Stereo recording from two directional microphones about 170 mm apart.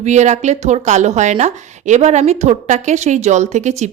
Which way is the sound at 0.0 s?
45° right (ahead or behind).